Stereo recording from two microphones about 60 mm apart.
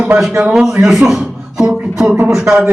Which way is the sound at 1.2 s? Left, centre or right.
Centre.